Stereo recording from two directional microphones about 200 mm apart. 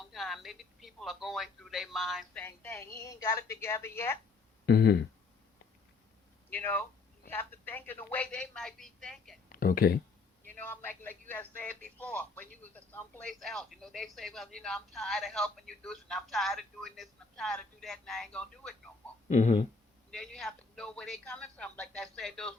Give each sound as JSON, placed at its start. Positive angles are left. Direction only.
{"t": 0.0, "sound": "speech", "side_deg": 0}
{"t": 2.4, "sound": "a woman's voice", "side_deg": 10}
{"t": 4.6, "sound": "speech", "side_deg": 50}
{"t": 6.5, "sound": "a woman's voice", "side_deg": 10}
{"t": 9.5, "sound": "speech", "side_deg": 45}
{"t": 10.5, "sound": "speech", "side_deg": 10}
{"t": 19.3, "sound": "speech", "side_deg": 35}
{"t": 20.1, "sound": "speech", "side_deg": 5}